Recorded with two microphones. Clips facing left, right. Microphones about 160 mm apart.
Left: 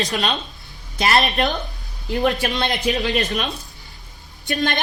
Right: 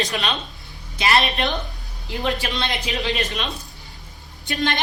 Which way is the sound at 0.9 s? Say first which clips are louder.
Left 2 dB; 45° left (ahead or behind).